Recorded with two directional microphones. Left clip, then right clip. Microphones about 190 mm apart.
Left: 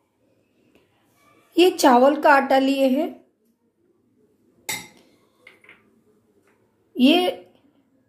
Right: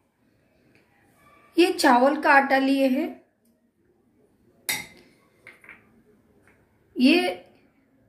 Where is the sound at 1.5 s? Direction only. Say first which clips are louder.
Left 3 dB; 50° left (ahead or behind).